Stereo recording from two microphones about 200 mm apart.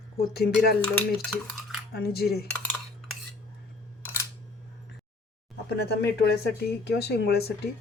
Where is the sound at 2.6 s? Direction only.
5° left (ahead or behind).